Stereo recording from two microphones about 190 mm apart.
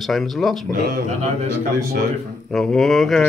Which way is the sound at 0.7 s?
50° right (ahead or behind).